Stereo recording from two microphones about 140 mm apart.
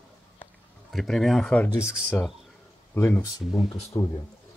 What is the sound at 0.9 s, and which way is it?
Speech, centre (ahead or behind).